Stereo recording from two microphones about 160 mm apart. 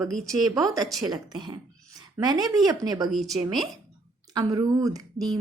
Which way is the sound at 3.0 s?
Centre (ahead or behind).